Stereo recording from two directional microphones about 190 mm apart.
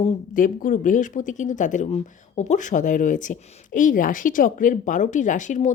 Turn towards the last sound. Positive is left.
turn(degrees=40)  # may be behind; listen again after turning